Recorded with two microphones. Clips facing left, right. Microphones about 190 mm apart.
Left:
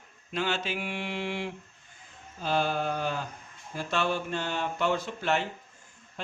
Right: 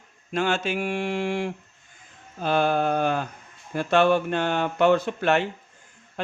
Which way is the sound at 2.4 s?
60° right (ahead or behind).